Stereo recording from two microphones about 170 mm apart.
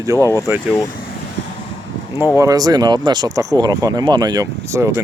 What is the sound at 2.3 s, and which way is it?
Speech, 20° right (ahead or behind).